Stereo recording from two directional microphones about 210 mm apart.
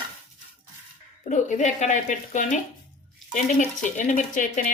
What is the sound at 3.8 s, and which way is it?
Speech, 35° left (ahead or behind).